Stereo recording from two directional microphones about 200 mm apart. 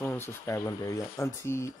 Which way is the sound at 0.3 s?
15° left (ahead or behind).